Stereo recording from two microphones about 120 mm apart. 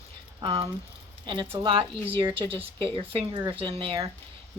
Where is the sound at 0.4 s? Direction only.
50° right (ahead or behind).